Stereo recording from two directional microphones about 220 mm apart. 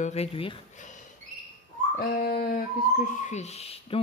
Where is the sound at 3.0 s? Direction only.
35° left (ahead or behind).